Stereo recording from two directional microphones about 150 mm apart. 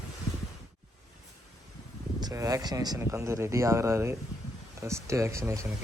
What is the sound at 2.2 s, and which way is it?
Speech, 25° right (ahead or behind).